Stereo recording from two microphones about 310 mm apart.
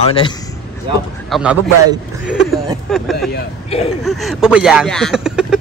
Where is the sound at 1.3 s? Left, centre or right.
Centre.